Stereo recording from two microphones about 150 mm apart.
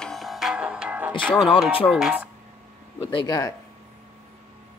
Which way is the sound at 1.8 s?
5° right (ahead or behind).